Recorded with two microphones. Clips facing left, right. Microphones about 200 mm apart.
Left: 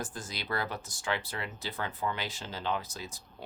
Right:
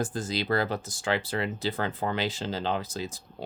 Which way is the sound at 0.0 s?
25° right (ahead or behind).